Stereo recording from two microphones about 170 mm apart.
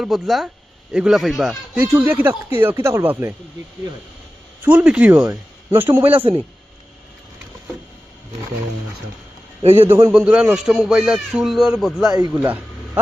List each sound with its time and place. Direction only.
0.0 s a man's voice: centre (ahead or behind)
4.6 s a man's voice: 10° right (ahead or behind)
6.1 s a man's voice: 30° right (ahead or behind)
9.6 s a man's voice: 35° right (ahead or behind)
10.1 s a man's voice: 5° right (ahead or behind)